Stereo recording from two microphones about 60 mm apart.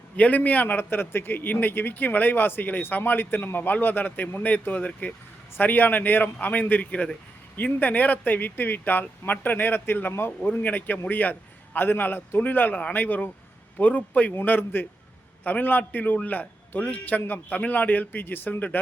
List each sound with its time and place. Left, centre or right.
0.2 s a man's voice: left